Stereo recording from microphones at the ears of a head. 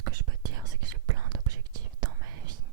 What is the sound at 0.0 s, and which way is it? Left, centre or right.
Whispering, right.